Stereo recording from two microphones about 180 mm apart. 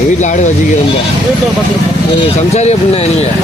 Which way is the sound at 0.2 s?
40° left (ahead or behind).